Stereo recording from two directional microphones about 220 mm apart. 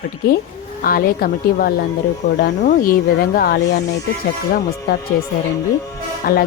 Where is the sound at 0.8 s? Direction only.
40° left (ahead or behind).